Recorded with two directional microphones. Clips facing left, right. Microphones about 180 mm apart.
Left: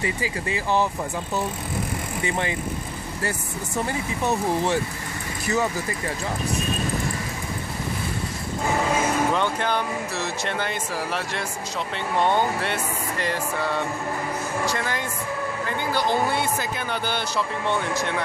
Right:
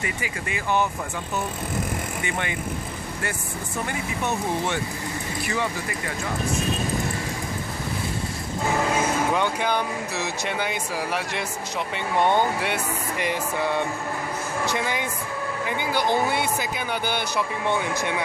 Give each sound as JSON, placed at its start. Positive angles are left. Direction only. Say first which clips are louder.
{"t": 0.0, "sound": "speech", "louder": "left 4 dB", "side_deg": 30}
{"t": 2.2, "sound": "speech", "louder": "left 5 dB", "side_deg": 30}
{"t": 9.3, "sound": "speech", "louder": "even", "side_deg": -10}